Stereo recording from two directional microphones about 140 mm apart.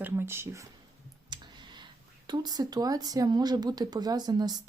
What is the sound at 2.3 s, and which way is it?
Speech, 30° right (ahead or behind).